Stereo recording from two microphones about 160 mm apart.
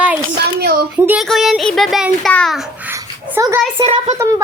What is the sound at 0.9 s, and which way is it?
Speech, 10° right (ahead or behind).